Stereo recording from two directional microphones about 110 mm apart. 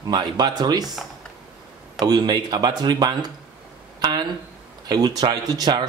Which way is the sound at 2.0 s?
40° right (ahead or behind).